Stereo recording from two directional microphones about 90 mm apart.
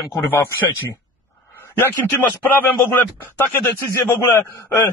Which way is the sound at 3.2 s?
25° left (ahead or behind).